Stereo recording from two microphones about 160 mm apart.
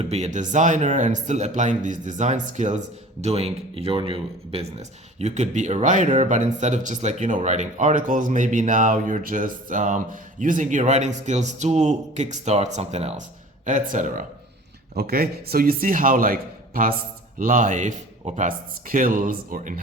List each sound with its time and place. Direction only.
0.0 s speech: 45° right (ahead or behind)
14.9 s speech: 75° right (ahead or behind)